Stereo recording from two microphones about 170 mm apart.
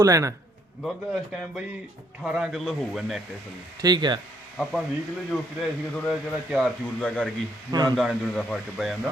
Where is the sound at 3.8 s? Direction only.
25° right (ahead or behind).